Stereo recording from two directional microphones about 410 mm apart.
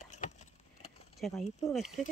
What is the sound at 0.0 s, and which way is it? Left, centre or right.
Vehicle, centre.